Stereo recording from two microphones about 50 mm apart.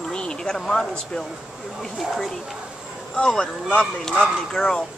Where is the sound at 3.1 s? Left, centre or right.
Centre.